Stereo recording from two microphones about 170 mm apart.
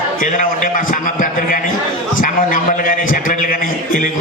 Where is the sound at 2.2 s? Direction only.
50° left (ahead or behind).